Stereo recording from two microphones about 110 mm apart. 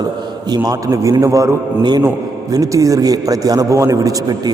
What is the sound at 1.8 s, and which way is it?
A man's voice, 40° right (ahead or behind).